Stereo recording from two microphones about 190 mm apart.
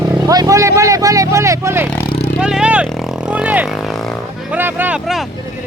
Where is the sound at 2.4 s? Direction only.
5° right (ahead or behind).